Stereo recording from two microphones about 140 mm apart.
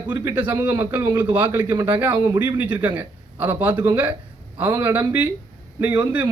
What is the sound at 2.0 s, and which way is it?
A man's voice, 15° right (ahead or behind).